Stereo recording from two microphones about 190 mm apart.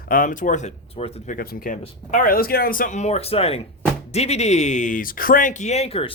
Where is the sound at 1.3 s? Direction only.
50° left (ahead or behind); by 6.1 s 30° left (ahead or behind).